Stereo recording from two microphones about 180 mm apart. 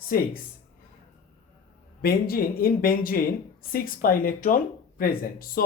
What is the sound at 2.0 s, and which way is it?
Speech, 55° left (ahead or behind).